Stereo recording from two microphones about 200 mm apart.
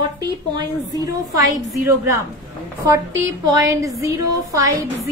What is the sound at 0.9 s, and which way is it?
Speech, 20° right (ahead or behind).